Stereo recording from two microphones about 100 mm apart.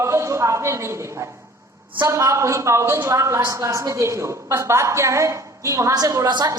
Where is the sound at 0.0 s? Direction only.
30° right (ahead or behind).